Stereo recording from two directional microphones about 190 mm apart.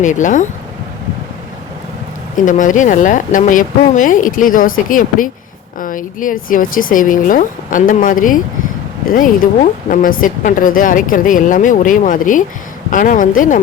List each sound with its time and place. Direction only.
0.0 s speech: 40° left (ahead or behind)
2.3 s a woman's voice: 45° left (ahead or behind)